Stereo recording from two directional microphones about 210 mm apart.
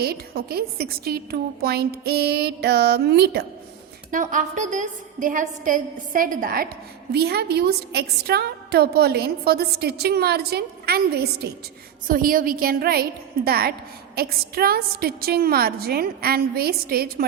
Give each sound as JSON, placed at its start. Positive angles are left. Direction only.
{"t": 0.0, "sound": "a woman's voice", "side_deg": -50}
{"t": 4.1, "sound": "a woman's voice", "side_deg": -35}